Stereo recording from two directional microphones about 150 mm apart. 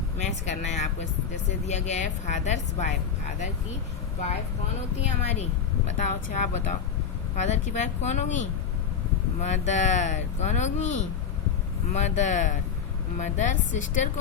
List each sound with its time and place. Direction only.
0.2 s speech: 50° left (ahead or behind)
5.2 s speech: 45° left (ahead or behind)